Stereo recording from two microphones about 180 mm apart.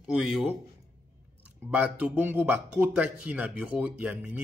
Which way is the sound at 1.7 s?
5° right (ahead or behind).